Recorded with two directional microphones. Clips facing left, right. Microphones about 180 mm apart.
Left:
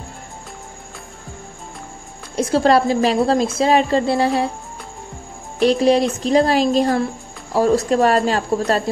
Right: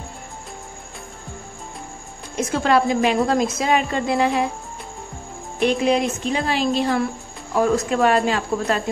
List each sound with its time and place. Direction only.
2.3 s speech: 30° left (ahead or behind)
5.6 s speech: 35° left (ahead or behind)